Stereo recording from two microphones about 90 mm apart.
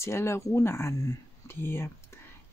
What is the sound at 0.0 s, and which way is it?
Speech, 30° left (ahead or behind).